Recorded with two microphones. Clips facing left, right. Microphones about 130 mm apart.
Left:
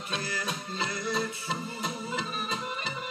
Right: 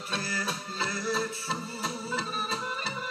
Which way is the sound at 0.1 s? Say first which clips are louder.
Right 1 dB; 35° right (ahead or behind).